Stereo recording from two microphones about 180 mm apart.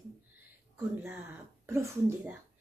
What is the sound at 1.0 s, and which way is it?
Speech, 10° right (ahead or behind).